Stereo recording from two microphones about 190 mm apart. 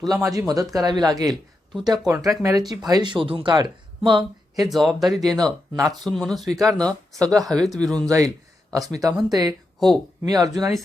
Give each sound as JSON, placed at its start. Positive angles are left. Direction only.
{"t": 0.1, "sound": "speech", "side_deg": -15}
{"t": 4.6, "sound": "speech", "side_deg": 0}
{"t": 8.7, "sound": "speech", "side_deg": -20}